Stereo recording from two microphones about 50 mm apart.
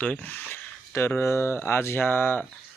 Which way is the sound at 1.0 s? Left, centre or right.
Left.